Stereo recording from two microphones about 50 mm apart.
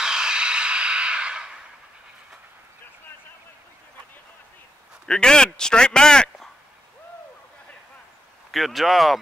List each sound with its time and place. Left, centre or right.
0.0 s a sound: centre
5.0 s a man's voice: centre
8.5 s speech: centre